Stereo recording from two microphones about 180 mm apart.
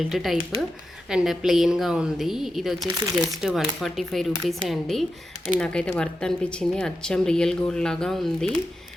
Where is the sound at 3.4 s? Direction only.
Centre (ahead or behind).